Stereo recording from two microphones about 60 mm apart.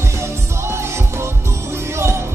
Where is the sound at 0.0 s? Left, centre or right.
Right.